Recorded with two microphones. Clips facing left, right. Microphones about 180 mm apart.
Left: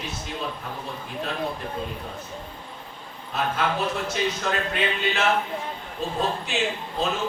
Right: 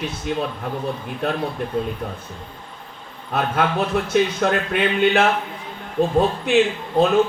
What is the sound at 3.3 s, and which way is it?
Speech, 55° right (ahead or behind).